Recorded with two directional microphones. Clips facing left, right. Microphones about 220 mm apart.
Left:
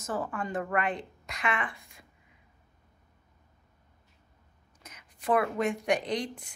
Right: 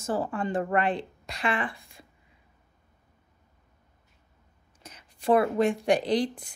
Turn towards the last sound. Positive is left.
turn(degrees=-30)  # may be behind; listen again after turning